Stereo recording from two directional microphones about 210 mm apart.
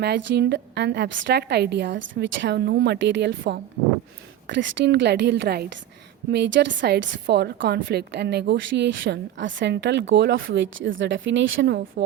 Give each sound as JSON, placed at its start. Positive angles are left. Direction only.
{"t": 0.0, "sound": "a woman's voice", "side_deg": -50}